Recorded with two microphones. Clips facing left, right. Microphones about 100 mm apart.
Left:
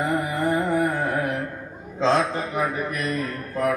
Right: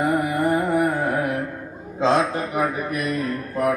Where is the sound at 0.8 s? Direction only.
30° right (ahead or behind).